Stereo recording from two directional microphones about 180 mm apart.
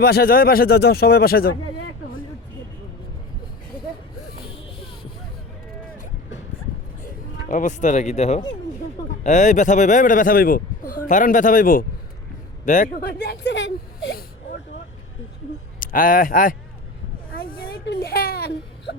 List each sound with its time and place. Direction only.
0.0 s speech: 60° left (ahead or behind)
7.4 s a man's voice: 45° left (ahead or behind); by 14.3 s 65° left (ahead or behind)
15.8 s speech: 50° left (ahead or behind)
17.4 s baby cry: 55° left (ahead or behind)